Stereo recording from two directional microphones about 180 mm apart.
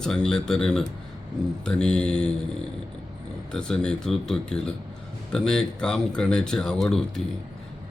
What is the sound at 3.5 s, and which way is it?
Speech, 5° left (ahead or behind).